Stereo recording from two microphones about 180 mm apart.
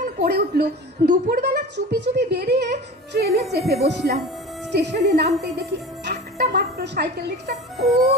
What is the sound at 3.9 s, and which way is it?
A woman's voice, 70° right (ahead or behind).